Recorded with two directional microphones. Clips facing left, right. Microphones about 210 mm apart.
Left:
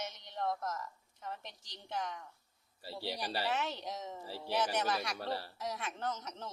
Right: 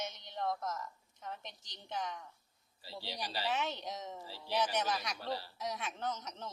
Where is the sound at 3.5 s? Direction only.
5° left (ahead or behind).